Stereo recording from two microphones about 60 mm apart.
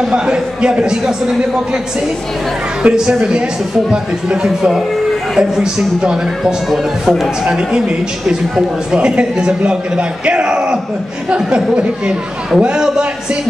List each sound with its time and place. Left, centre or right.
0.0 s speech: centre
2.8 s speech: centre
4.5 s a man's voice: centre
7.4 s speech: centre